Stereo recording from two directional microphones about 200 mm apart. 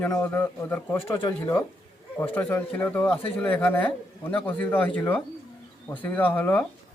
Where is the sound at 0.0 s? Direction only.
10° left (ahead or behind).